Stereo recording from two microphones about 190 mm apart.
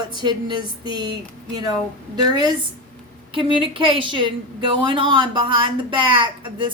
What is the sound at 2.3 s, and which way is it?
A woman's voice, 20° right (ahead or behind).